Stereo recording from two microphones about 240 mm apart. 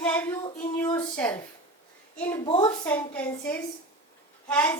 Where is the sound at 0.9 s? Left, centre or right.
Centre.